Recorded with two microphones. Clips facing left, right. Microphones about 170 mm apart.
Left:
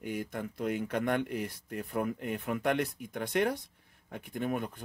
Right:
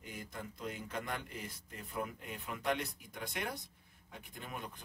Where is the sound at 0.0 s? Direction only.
65° left (ahead or behind).